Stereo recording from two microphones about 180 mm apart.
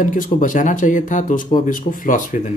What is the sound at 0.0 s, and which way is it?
Speech, 45° left (ahead or behind).